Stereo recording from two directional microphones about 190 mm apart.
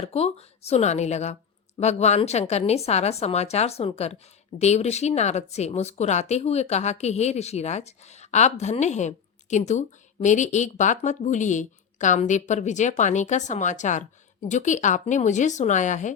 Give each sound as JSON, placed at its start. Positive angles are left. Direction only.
{"t": 0.1, "sound": "a woman's voice", "side_deg": 35}